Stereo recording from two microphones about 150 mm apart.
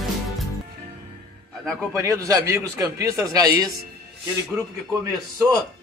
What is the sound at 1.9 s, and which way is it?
A man's voice, 20° right (ahead or behind).